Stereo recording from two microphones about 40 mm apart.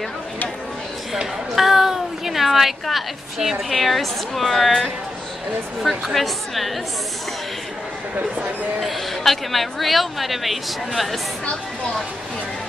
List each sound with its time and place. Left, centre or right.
1.5 s a woman's voice: centre
8.2 s speech: right
8.8 s a woman's voice: centre